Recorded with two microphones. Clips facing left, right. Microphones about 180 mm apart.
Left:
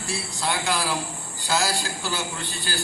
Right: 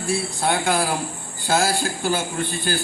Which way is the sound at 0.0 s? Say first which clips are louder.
Right 6 dB; 55° right (ahead or behind).